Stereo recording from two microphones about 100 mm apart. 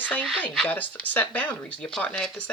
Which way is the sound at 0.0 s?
15° left (ahead or behind).